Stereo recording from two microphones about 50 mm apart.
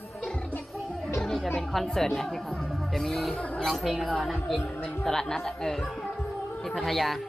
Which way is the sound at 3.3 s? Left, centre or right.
Left.